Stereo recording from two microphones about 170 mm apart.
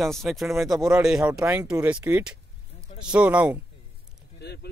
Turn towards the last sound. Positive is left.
turn(degrees=75)  # may be behind; listen again after turning